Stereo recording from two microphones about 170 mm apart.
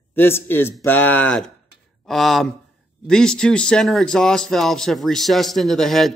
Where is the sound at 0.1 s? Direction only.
10° left (ahead or behind).